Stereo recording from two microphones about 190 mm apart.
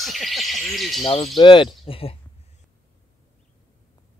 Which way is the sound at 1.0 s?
30° left (ahead or behind).